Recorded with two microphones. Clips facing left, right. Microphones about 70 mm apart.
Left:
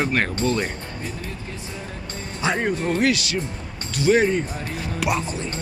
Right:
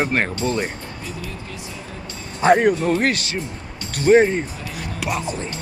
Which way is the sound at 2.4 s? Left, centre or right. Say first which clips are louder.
Right 8 dB; right.